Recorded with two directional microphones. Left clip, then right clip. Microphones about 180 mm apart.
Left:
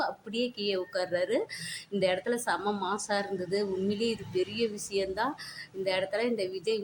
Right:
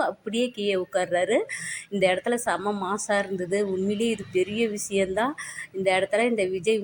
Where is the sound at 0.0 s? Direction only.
20° right (ahead or behind).